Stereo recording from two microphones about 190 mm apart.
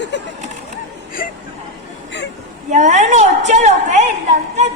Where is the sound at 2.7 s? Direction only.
40° right (ahead or behind).